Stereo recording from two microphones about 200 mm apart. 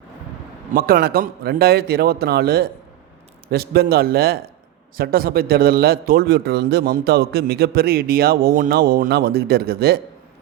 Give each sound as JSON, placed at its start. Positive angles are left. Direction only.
{"t": 0.7, "sound": "a man's voice", "side_deg": -45}